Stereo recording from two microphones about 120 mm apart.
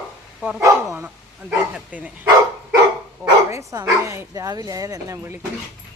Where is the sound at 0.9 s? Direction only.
15° right (ahead or behind).